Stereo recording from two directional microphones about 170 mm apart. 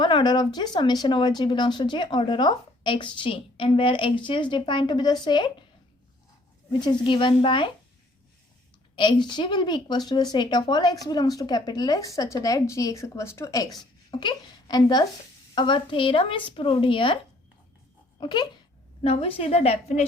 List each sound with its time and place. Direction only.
0.0 s speech: 25° left (ahead or behind)
6.7 s speech: 30° left (ahead or behind)
9.0 s speech: 25° left (ahead or behind)
18.2 s a woman's voice: 25° left (ahead or behind)